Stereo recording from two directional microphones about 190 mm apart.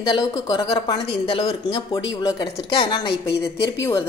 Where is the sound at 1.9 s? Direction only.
20° left (ahead or behind).